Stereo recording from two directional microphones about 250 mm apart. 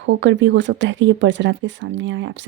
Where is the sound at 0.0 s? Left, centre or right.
Right.